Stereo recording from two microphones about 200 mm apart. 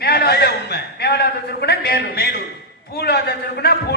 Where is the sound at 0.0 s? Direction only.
50° left (ahead or behind).